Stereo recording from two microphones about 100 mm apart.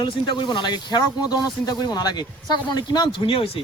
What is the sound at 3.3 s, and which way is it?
Speech, 70° left (ahead or behind).